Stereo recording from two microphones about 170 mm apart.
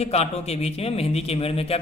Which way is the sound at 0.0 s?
40° left (ahead or behind).